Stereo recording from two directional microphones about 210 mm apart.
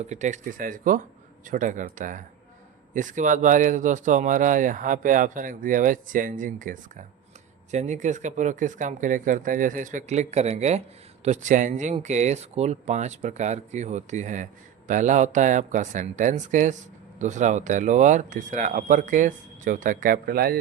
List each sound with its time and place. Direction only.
0.0 s speech: 35° right (ahead or behind)